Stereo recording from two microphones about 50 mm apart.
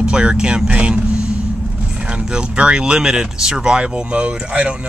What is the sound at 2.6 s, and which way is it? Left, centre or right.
Speech, centre.